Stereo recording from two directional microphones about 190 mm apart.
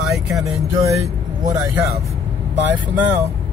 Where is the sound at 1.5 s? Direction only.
15° right (ahead or behind).